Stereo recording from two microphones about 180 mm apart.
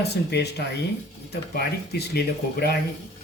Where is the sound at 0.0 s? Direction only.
65° left (ahead or behind).